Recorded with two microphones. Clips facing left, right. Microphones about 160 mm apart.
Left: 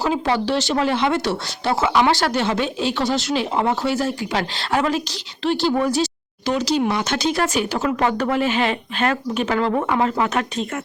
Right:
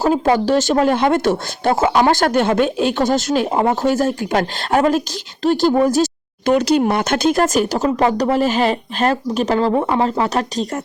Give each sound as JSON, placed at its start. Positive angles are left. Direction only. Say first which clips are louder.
{"t": 0.0, "sound": "speech", "louder": "right 5 dB", "side_deg": -45}